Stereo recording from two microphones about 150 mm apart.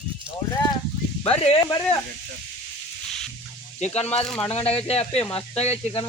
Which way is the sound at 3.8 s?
45° left (ahead or behind).